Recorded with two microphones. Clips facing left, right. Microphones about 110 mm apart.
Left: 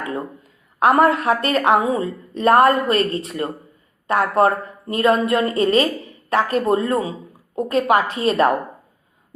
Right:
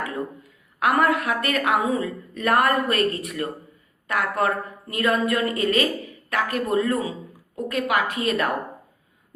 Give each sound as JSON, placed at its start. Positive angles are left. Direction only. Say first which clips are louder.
{"t": 0.8, "sound": "a woman's voice", "louder": "left 5 dB", "side_deg": 30}